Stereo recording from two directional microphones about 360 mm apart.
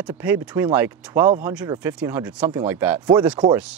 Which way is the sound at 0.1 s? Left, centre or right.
Centre.